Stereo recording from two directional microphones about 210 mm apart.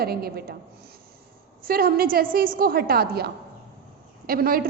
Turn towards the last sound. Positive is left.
turn(degrees=-45)  # may be behind; listen again after turning